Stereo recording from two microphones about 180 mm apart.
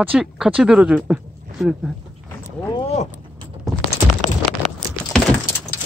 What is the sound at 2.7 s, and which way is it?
Vehicle, 30° left (ahead or behind).